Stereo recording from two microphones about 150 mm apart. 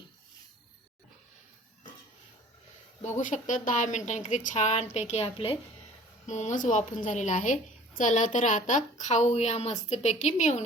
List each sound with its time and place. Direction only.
3.2 s a woman's voice: 60° left (ahead or behind); by 5.5 s 40° left (ahead or behind)
6.2 s a woman's voice: 50° left (ahead or behind)